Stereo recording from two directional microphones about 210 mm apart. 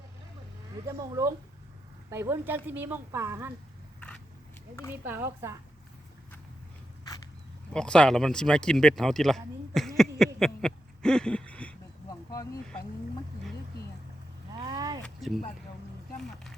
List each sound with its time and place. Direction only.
0.9 s speech: 15° right (ahead or behind)
5.0 s speech: 10° right (ahead or behind)
7.7 s speech: 5° left (ahead or behind)
10.4 s a sound: centre (ahead or behind)
14.6 s speech: 20° right (ahead or behind)
15.0 s speech: centre (ahead or behind)